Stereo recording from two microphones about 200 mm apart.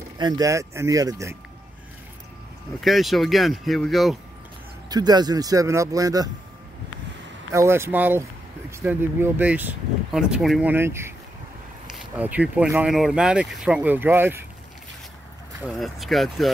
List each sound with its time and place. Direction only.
0.2 s speech: 20° right (ahead or behind)
2.8 s speech: centre (ahead or behind)
4.8 s speech: 20° right (ahead or behind)
7.5 s speech: 15° right (ahead or behind)
15.6 s speech: centre (ahead or behind)